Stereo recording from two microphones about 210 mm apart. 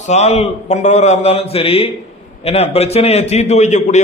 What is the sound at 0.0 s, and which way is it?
A man's voice, 30° left (ahead or behind).